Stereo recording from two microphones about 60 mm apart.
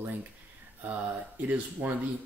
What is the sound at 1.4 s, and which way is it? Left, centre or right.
Speech, right.